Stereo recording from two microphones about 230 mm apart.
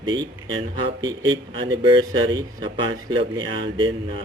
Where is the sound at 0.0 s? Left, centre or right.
Centre.